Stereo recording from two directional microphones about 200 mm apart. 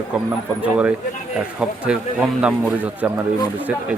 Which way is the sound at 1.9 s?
5° right (ahead or behind).